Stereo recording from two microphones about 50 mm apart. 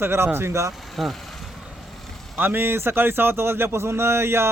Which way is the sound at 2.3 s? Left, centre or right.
Right.